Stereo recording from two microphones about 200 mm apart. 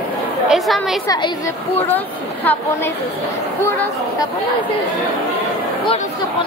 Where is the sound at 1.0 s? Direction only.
20° left (ahead or behind).